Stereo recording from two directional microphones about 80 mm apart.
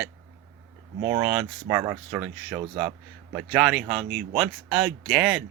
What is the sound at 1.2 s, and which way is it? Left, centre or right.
Speech, centre.